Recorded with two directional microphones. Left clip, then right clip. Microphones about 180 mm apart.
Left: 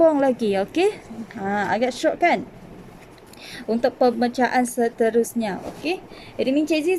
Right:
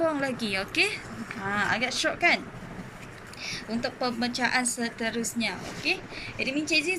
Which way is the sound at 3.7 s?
50° left (ahead or behind).